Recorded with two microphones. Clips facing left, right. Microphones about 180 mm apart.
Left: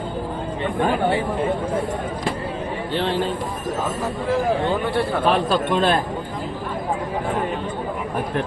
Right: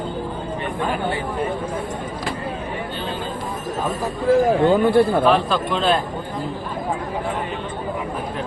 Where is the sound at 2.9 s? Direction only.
80° left.